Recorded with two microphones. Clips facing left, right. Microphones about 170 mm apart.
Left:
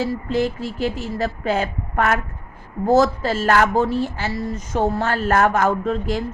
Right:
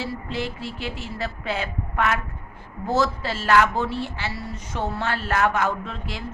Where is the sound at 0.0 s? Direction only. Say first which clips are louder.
Left 8 dB; 45° left (ahead or behind).